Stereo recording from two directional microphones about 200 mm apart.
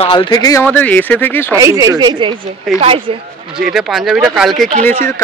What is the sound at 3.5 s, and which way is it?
Speech, centre (ahead or behind).